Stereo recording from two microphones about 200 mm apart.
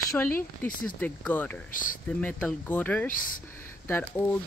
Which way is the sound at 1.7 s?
40° left (ahead or behind).